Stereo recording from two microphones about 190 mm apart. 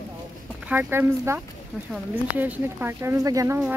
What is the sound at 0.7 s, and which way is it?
Speech, 10° right (ahead or behind).